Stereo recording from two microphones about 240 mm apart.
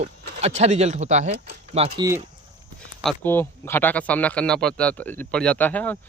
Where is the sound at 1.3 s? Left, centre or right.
Right.